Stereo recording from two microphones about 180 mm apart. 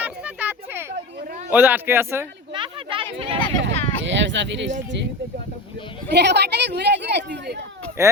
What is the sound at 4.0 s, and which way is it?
Speech, 90° right.